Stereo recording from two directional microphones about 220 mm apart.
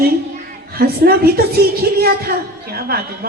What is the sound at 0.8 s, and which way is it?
A woman's voice, 45° right (ahead or behind).